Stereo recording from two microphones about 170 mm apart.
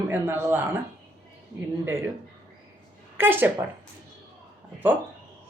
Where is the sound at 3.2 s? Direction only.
15° right (ahead or behind).